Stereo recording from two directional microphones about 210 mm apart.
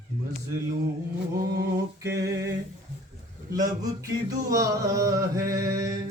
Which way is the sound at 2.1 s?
15° right (ahead or behind).